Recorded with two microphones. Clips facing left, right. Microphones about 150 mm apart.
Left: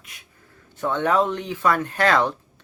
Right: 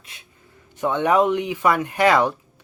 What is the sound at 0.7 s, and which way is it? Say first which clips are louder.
Speech: right 2 dB; 15° right (ahead or behind).